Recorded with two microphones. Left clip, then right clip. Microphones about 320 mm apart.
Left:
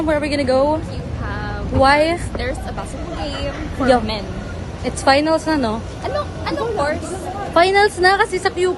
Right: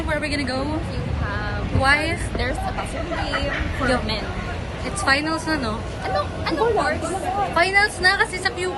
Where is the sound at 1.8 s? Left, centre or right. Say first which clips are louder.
Left 6 dB; left.